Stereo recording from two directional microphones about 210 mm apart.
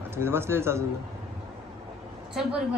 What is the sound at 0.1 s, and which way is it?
Speech, 10° right (ahead or behind).